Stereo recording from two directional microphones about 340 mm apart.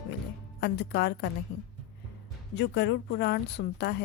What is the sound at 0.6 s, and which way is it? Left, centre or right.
Speech, left.